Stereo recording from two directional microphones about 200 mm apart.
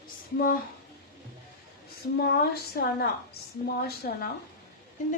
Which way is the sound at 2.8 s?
55° left (ahead or behind).